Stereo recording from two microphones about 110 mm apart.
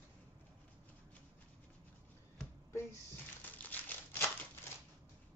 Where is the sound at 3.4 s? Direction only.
15° left (ahead or behind).